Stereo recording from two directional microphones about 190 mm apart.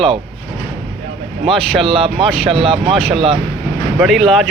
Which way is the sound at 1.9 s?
30° right (ahead or behind).